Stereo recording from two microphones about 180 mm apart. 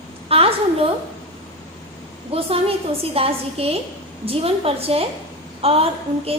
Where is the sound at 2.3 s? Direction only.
30° right (ahead or behind).